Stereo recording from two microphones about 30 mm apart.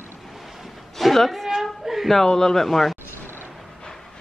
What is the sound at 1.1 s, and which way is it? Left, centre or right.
Speech, centre.